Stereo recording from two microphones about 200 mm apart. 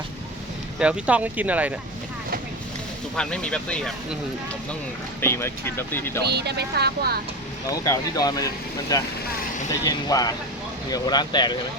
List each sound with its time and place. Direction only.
0.8 s speech: 5° right (ahead or behind)
3.2 s speech: 5° left (ahead or behind)
5.2 s speech: 10° left (ahead or behind)
6.2 s speech: 55° right (ahead or behind)
7.7 s speech: 15° left (ahead or behind)